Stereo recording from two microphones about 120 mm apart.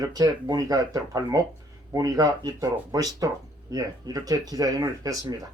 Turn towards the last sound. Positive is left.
turn(degrees=-30)  # may be behind; listen again after turning